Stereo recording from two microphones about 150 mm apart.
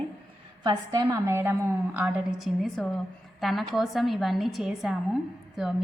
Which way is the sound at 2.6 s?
5° left (ahead or behind).